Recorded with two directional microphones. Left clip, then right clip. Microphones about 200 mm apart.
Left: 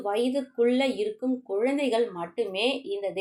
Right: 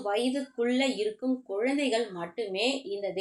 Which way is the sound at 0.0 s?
30° left (ahead or behind).